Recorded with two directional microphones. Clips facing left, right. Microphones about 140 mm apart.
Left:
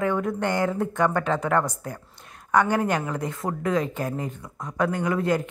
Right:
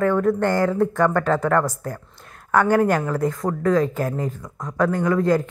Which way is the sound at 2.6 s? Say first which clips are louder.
Right 6 dB; 45° right (ahead or behind).